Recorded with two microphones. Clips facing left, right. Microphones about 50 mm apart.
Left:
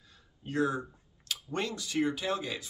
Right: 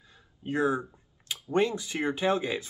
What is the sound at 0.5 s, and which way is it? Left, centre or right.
Speech, right.